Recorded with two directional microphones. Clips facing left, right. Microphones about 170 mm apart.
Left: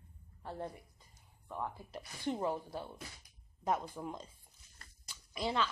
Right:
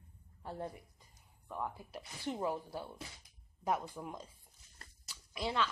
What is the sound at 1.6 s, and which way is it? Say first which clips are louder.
Speech: even; 5° right (ahead or behind).